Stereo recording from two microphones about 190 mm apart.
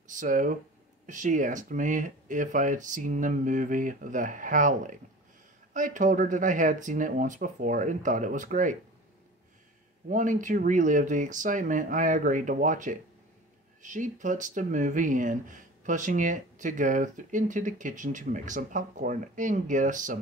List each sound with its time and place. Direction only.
0.1 s speech: 45° right (ahead or behind)
10.0 s speech: 40° right (ahead or behind)